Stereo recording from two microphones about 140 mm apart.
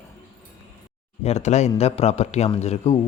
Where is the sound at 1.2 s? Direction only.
55° left (ahead or behind).